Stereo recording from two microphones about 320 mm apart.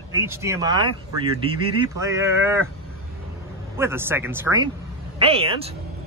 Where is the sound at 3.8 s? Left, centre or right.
Centre.